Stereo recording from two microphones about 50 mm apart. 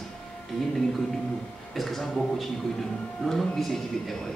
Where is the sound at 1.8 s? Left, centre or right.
Centre.